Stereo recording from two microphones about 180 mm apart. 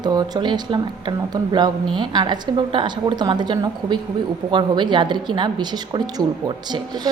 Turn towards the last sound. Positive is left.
turn(degrees=-25)  # may be behind; listen again after turning